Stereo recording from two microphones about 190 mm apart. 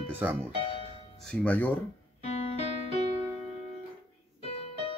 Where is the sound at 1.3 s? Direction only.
5° left (ahead or behind).